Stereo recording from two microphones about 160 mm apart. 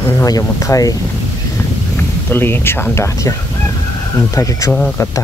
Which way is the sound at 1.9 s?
15° left (ahead or behind).